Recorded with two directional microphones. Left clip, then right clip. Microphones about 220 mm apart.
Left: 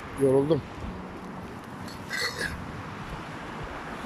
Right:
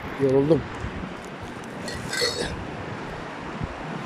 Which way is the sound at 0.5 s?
5° right (ahead or behind).